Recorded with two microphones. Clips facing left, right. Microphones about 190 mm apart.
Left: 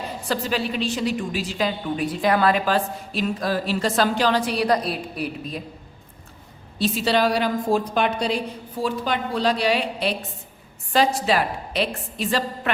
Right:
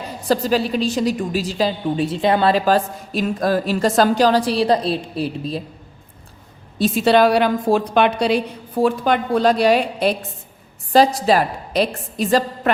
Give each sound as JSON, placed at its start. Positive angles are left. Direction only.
{"t": 0.3, "sound": "a woman's voice", "side_deg": -40}
{"t": 6.7, "sound": "a woman's voice", "side_deg": -50}